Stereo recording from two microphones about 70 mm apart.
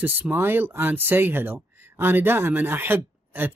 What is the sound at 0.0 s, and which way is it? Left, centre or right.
Speech, right.